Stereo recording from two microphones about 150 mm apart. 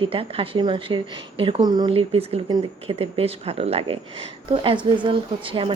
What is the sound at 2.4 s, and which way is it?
Speech, 30° right (ahead or behind).